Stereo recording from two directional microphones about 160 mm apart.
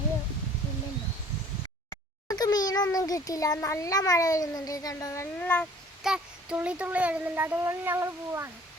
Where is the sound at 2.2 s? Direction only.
25° left (ahead or behind).